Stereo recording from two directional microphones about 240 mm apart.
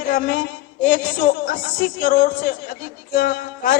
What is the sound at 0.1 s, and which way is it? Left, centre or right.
A man's voice, left.